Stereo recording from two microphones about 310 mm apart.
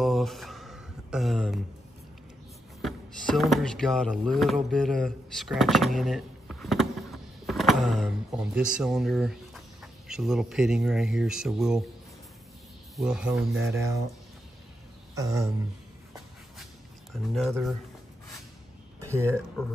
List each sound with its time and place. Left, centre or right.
0.0 s a sound: centre
2.8 s speech: centre
12.9 s speech: centre
15.1 s speech: centre
17.1 s speech: centre